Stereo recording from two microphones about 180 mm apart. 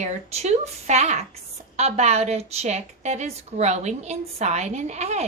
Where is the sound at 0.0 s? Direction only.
35° right (ahead or behind).